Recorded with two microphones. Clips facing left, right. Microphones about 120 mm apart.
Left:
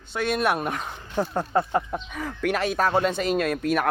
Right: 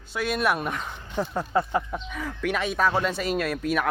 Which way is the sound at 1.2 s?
30° left (ahead or behind).